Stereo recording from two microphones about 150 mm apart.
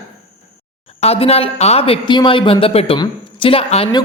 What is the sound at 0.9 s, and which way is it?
A woman's voice, 45° left (ahead or behind).